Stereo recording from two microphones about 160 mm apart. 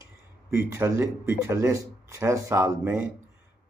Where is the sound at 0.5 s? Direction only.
15° right (ahead or behind).